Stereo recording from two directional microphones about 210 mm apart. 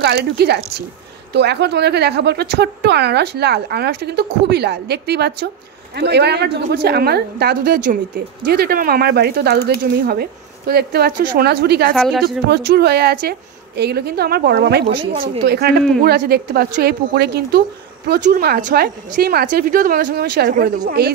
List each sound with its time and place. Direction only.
0.0 s a woman's voice: 50° right (ahead or behind)
10.7 s a woman's voice: 50° right (ahead or behind)
11.9 s speech: centre (ahead or behind)
12.4 s a woman's voice: 50° right (ahead or behind)
15.0 s a woman's voice: 25° right (ahead or behind)
15.4 s a woman's voice: 50° right (ahead or behind)